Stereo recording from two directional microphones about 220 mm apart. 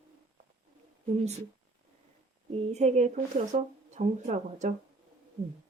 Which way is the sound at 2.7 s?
30° right (ahead or behind).